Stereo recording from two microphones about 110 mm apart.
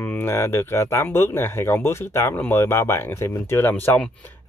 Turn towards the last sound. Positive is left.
turn(degrees=20)  # may be behind; listen again after turning